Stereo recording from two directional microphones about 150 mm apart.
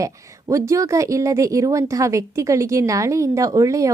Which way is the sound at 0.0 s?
20° right (ahead or behind).